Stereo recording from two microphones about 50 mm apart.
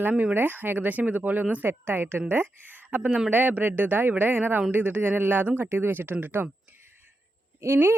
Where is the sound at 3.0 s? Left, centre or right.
Centre.